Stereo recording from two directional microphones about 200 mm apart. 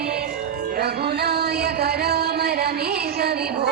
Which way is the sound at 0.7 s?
55° right (ahead or behind).